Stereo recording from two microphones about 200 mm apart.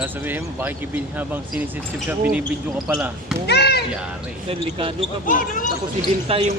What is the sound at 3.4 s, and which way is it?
Speech, 55° left (ahead or behind).